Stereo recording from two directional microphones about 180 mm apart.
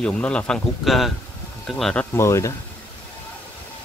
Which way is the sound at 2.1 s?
15° left (ahead or behind).